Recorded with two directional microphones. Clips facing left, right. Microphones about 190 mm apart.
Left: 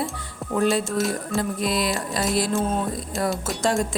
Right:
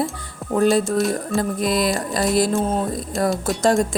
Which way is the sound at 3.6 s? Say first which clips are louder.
Right 5 dB; 40° right (ahead or behind).